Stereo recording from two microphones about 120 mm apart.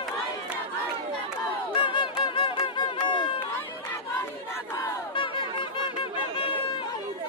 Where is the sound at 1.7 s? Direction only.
45° left (ahead or behind).